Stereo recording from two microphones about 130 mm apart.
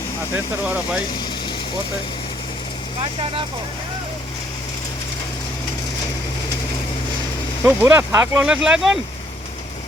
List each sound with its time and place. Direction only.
3.0 s speech: 45° right (ahead or behind)
7.6 s speech: 15° right (ahead or behind)